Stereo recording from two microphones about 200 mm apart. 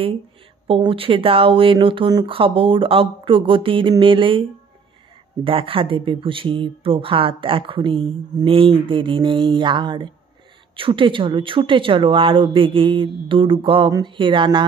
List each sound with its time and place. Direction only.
0.7 s speech: 25° right (ahead or behind)